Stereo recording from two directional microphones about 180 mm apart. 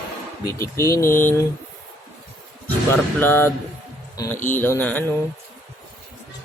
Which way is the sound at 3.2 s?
10° left (ahead or behind).